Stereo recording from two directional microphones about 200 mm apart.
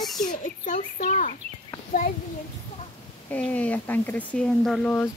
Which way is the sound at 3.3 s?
5° left (ahead or behind).